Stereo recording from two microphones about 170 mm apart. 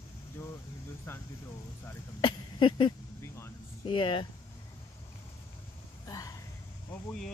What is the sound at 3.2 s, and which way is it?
Vehicle, 15° left (ahead or behind).